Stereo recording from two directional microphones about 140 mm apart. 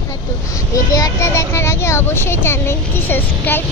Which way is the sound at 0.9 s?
25° left (ahead or behind).